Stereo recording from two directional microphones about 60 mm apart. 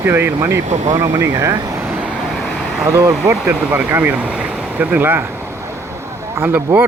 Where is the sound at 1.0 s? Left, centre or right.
Right.